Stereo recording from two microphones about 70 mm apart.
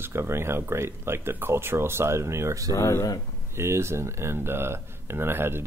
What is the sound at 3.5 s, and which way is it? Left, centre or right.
Speech, right.